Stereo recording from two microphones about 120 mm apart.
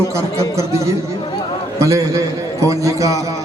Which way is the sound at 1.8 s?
25° right (ahead or behind).